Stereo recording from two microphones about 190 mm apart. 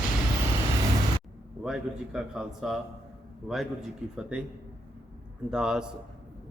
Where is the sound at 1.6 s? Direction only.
5° right (ahead or behind).